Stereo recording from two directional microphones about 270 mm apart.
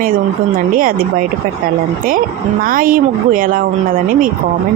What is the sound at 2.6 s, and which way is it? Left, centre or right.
Speech, right.